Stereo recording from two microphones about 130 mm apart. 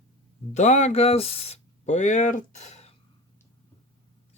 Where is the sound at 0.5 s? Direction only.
65° left (ahead or behind).